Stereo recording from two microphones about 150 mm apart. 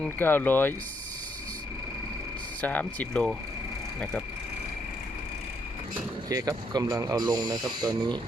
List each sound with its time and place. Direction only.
0.0 s speech: 15° left (ahead or behind)
2.6 s speech: 10° left (ahead or behind)
6.2 s speech: 25° right (ahead or behind)